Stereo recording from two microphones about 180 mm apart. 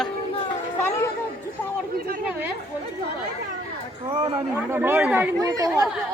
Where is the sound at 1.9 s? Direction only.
60° right (ahead or behind).